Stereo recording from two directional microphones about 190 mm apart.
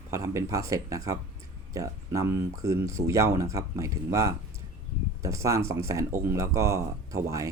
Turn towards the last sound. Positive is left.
turn(degrees=-15)  # may be behind; listen again after turning